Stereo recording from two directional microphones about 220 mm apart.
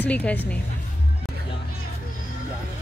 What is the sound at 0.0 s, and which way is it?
Speech, 5° left (ahead or behind).